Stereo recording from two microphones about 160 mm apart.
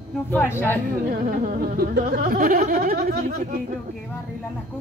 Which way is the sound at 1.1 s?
55° right (ahead or behind).